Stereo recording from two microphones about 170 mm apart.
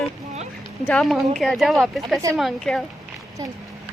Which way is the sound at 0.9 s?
Centre (ahead or behind).